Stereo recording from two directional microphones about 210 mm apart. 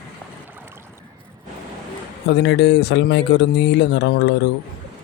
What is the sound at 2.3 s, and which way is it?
Speech, 55° left (ahead or behind).